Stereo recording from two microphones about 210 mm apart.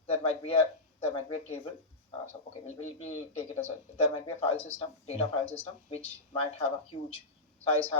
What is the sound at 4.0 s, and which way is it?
Speech, 30° left (ahead or behind).